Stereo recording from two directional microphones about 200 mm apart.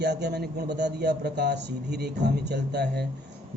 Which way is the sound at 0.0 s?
55° right (ahead or behind).